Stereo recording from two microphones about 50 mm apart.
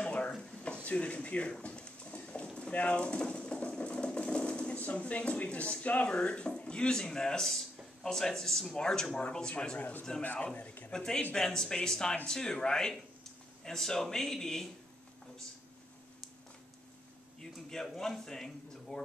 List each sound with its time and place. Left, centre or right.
0.0 s drawer open or close: left
2.2 s speech: centre
10.9 s speech: centre
17.4 s a sound: centre
17.9 s speech: centre